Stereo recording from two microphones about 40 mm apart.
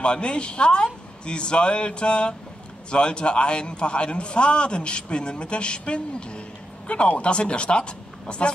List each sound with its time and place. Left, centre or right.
0.0 s a man's voice: left